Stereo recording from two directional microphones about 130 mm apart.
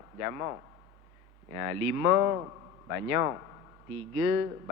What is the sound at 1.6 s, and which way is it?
A man's voice, 25° right (ahead or behind).